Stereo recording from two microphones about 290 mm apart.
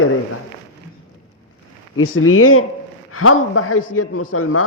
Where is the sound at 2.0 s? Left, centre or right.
Left.